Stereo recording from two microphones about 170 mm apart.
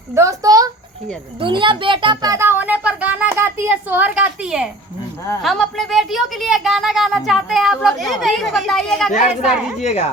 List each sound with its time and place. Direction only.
0.1 s a child's voice: 20° right (ahead or behind)
2.3 s a child's voice: 15° right (ahead or behind); by 9.1 s centre (ahead or behind)
9.8 s speech: 40° left (ahead or behind)